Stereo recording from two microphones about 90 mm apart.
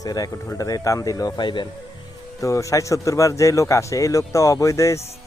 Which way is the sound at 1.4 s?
60° left (ahead or behind).